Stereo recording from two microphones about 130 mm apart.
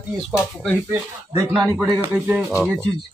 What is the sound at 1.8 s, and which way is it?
Speech, 10° right (ahead or behind).